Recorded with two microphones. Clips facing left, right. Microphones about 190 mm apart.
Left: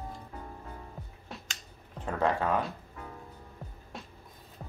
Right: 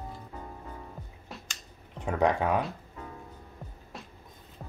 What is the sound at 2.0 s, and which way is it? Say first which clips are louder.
Speech: right 3 dB; 15° right (ahead or behind).